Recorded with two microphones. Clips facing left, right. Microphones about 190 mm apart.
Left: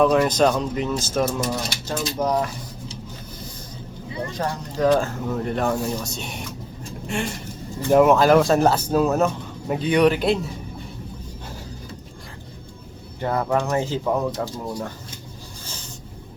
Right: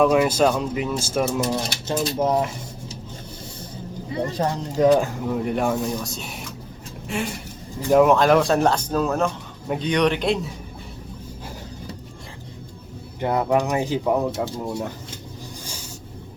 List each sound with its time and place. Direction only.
0.0 s speech: 10° right (ahead or behind)
1.5 s speech: 20° right (ahead or behind)
4.4 s speech: 25° right (ahead or behind); by 10.5 s centre (ahead or behind)
13.1 s speech: 15° right (ahead or behind)
14.3 s speech: 25° right (ahead or behind)
15.6 s a sound: 10° right (ahead or behind)